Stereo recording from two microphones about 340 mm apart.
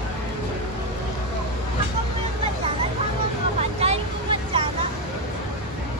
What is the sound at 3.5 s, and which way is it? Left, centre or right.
Vehicle, centre.